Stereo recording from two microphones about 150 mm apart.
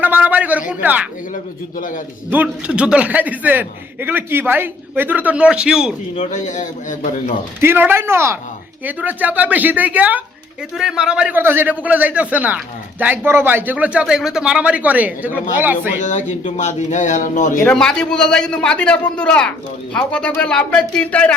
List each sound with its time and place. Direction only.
0.0 s a sound: 10° right (ahead or behind)
0.7 s a man's voice: 10° right (ahead or behind)
2.3 s a man's voice: 10° right (ahead or behind)
6.1 s a man's voice: 55° left (ahead or behind)
7.6 s a man's voice: 15° right (ahead or behind)
16.0 s speech: 55° left (ahead or behind)
17.6 s a man's voice: 5° left (ahead or behind)